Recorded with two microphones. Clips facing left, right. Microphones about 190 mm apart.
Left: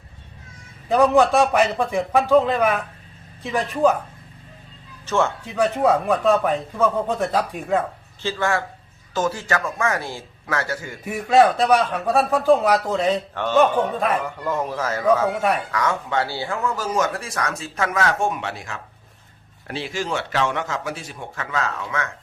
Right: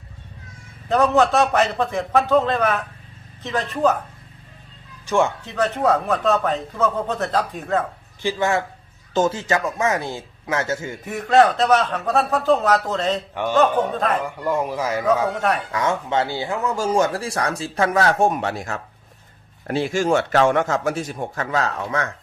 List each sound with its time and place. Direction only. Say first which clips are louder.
0.9 s speech: left 1 dB; 10° left (ahead or behind)
5.0 s a man's voice: right 2 dB; 15° right (ahead or behind)
5.5 s speech: left 1 dB; 10° left (ahead or behind)
8.2 s speech: right 2 dB; 15° right (ahead or behind)
11.0 s speech: even; 10° left (ahead or behind)
13.3 s a man's voice: even; 10° right (ahead or behind)
13.9 s speech: even; 10° left (ahead or behind)
14.3 s a man's voice: right 2 dB; 10° right (ahead or behind)
15.3 s speech: even; 10° left (ahead or behind)
15.7 s speech: right 1 dB; 25° right (ahead or behind)